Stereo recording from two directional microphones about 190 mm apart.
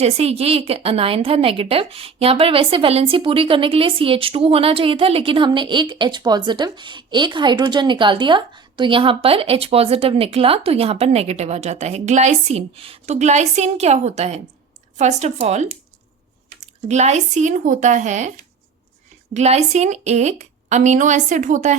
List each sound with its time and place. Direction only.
0.0 s a woman's voice: 35° right (ahead or behind)
19.3 s a woman's voice: 35° right (ahead or behind)